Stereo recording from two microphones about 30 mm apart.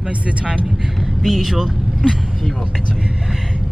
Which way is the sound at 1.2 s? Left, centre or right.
Centre.